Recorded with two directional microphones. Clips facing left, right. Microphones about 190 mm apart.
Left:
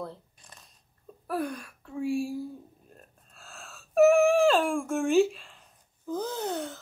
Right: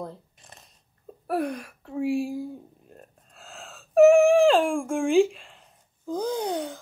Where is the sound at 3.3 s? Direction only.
15° right (ahead or behind).